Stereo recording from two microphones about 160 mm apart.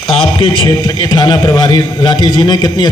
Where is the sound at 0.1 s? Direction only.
35° left (ahead or behind).